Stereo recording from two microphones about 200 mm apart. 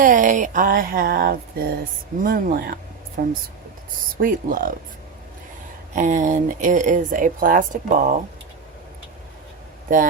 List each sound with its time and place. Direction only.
0.0 s a sound: 40° right (ahead or behind)
5.9 s speech: 40° right (ahead or behind)
9.9 s speech: 40° right (ahead or behind)